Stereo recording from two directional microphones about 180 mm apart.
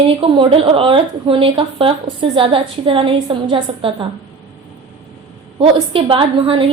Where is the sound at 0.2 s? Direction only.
30° right (ahead or behind).